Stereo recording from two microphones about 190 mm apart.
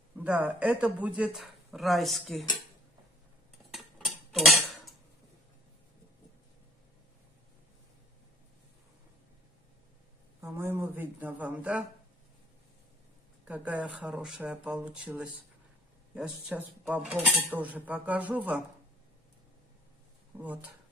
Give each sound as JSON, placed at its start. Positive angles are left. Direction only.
{"t": 0.2, "sound": "speech", "side_deg": -5}
{"t": 3.7, "sound": "cutlery", "side_deg": 0}
{"t": 10.4, "sound": "a sound", "side_deg": -10}
{"t": 13.5, "sound": "speech", "side_deg": -5}
{"t": 20.3, "sound": "speech", "side_deg": -10}